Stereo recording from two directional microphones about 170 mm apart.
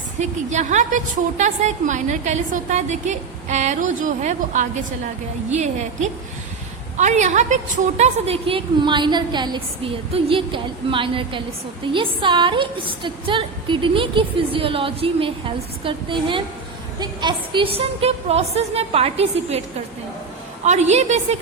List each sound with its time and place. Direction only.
0.2 s a woman's voice: 45° right (ahead or behind)
20.7 s a woman's voice: 40° right (ahead or behind)